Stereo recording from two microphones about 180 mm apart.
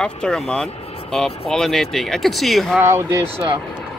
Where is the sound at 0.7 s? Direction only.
35° left (ahead or behind).